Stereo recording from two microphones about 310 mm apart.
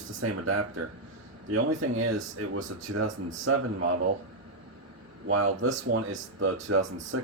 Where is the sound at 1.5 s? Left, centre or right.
Right.